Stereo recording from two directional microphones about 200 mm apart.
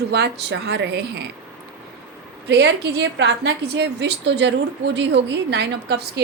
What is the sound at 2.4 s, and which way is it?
A woman's voice, 55° right (ahead or behind).